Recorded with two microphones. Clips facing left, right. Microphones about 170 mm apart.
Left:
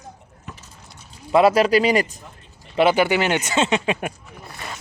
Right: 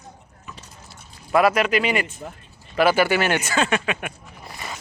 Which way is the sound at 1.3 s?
30° left (ahead or behind).